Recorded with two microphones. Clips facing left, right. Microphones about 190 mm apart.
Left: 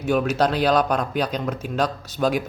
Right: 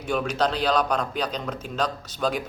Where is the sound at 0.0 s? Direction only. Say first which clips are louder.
Left 4 dB; 5° left (ahead or behind).